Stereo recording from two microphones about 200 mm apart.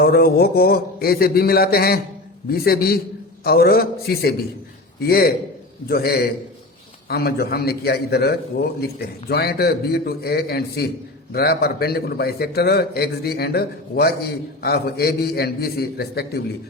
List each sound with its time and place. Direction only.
0.0 s a man's voice: 50° left (ahead or behind)